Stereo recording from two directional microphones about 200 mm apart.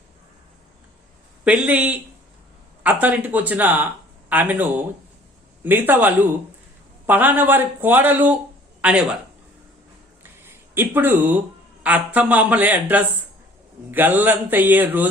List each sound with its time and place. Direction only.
1.5 s speech: 5° right (ahead or behind)
5.6 s a man's voice: 10° right (ahead or behind)
10.4 s a sound: 10° right (ahead or behind)
11.8 s speech: 5° right (ahead or behind)